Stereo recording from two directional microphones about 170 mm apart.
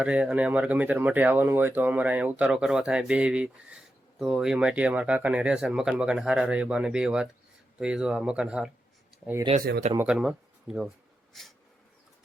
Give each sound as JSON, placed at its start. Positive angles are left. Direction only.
{"t": 0.0, "sound": "speech", "side_deg": -5}
{"t": 9.6, "sound": "speech", "side_deg": -70}
{"t": 10.0, "sound": "speech", "side_deg": -5}